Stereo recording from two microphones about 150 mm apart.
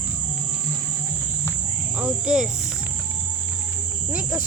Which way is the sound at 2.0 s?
5° right (ahead or behind).